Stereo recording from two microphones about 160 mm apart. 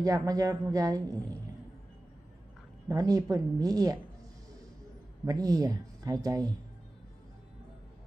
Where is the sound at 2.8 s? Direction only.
25° right (ahead or behind).